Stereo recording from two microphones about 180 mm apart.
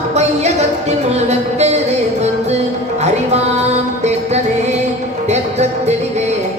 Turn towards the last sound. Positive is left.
turn(degrees=-40)  # may be behind; listen again after turning